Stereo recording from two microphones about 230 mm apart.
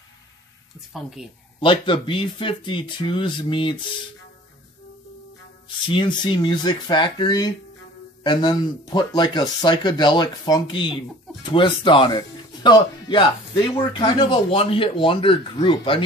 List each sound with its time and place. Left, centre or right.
1.6 s speech: left
5.9 s speech: left